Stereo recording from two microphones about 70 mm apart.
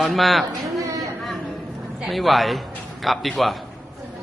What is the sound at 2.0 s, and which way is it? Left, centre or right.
A man's voice, centre.